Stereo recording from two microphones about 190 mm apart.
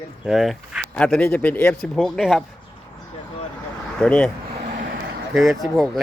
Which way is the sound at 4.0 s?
5° left (ahead or behind).